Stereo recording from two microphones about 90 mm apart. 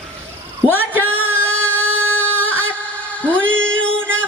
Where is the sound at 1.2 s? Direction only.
15° left (ahead or behind).